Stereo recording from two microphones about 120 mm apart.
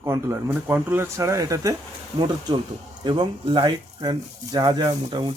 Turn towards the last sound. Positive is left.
turn(degrees=-35)  # may be behind; listen again after turning